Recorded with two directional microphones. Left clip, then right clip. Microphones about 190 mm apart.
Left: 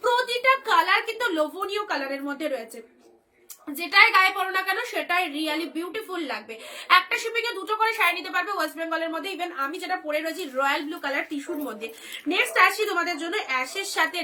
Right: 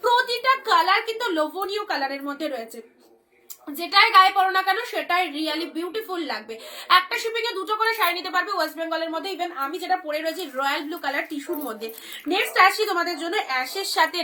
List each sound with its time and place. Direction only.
0.0 s a sound: 20° left (ahead or behind)
2.2 s a woman's voice: 20° left (ahead or behind)
4.4 s a woman's voice: 20° left (ahead or behind)